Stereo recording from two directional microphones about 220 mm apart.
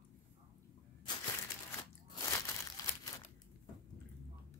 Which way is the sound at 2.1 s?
15° left (ahead or behind).